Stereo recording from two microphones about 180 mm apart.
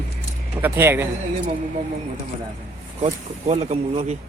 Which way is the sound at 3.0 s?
40° right (ahead or behind).